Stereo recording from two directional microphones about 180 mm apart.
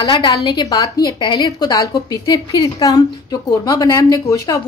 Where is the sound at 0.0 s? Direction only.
25° left (ahead or behind).